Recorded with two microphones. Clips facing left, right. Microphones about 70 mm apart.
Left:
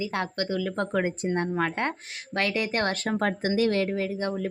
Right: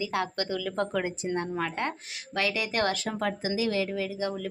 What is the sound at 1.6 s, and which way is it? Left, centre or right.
Speech, left.